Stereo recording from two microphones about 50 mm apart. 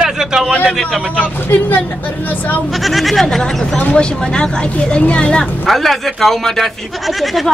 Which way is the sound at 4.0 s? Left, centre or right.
Centre.